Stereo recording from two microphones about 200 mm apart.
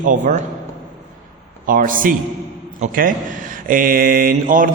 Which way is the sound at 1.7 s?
45° right (ahead or behind).